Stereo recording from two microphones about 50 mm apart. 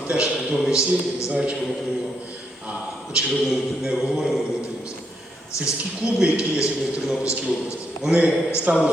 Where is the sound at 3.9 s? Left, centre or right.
Centre.